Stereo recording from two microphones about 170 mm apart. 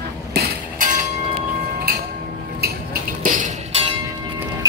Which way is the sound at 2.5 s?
65° right (ahead or behind).